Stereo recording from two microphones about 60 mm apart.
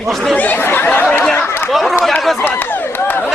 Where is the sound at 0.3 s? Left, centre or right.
Left.